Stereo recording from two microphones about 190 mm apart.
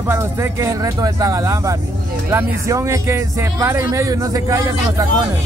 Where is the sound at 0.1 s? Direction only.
15° right (ahead or behind).